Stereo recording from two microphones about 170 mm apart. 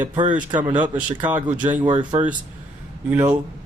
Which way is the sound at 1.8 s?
25° right (ahead or behind).